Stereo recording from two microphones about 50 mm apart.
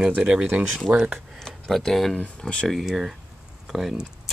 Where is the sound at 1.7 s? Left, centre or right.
Centre.